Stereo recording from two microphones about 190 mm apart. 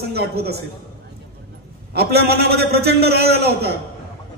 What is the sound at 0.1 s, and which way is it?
Speech, 55° right (ahead or behind).